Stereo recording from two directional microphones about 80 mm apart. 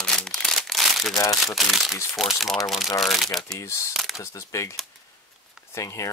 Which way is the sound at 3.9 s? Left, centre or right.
Centre.